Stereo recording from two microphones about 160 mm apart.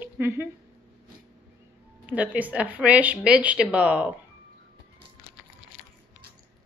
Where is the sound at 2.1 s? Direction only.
10° right (ahead or behind).